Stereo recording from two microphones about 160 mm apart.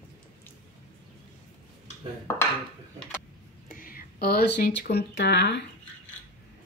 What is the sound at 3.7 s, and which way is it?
Speech, 65° left (ahead or behind).